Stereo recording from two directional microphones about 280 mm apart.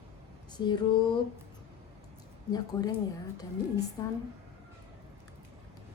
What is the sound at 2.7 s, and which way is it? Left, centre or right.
Speech, centre.